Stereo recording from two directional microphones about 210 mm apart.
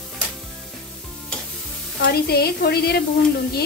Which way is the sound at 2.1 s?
50° left (ahead or behind).